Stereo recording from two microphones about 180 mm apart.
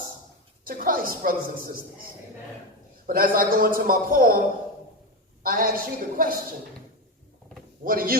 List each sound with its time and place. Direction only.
0.6 s a woman's voice: 50° right (ahead or behind)
3.1 s a woman's voice: 55° right (ahead or behind)
7.9 s a woman's voice: 55° right (ahead or behind)